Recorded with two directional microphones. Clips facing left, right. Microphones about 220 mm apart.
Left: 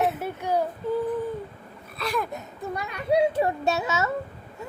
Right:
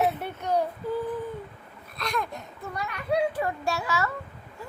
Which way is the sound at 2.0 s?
5° left (ahead or behind).